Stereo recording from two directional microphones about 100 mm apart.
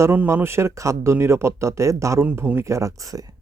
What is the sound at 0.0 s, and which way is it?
Speech, 25° right (ahead or behind).